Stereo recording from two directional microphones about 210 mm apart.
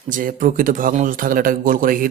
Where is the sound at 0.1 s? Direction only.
40° right (ahead or behind).